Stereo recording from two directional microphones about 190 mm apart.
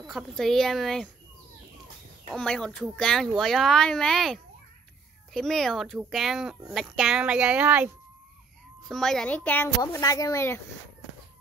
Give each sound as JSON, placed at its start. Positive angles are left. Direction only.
{"t": 0.0, "sound": "speech", "side_deg": 0}
{"t": 2.2, "sound": "speech", "side_deg": 5}
{"t": 8.8, "sound": "speech", "side_deg": 0}
{"t": 9.8, "sound": "speech", "side_deg": 20}